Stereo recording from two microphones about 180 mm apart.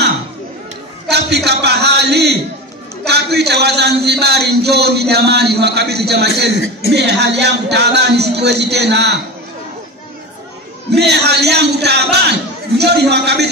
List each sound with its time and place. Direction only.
1.1 s a sound: 65° right (ahead or behind)
3.1 s a man's voice: 65° right (ahead or behind)
10.9 s speech: 70° right (ahead or behind)